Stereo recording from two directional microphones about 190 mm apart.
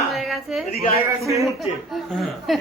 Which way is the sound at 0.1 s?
Centre (ahead or behind).